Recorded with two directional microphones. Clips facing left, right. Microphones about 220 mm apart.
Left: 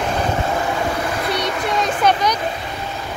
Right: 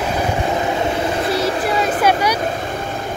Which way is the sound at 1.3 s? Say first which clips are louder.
Right 3 dB; 30° right (ahead or behind).